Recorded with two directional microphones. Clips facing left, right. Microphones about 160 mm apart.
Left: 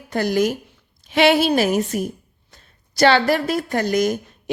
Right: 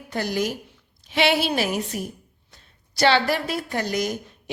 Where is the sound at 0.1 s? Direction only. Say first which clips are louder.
Left 6 dB; 50° left (ahead or behind).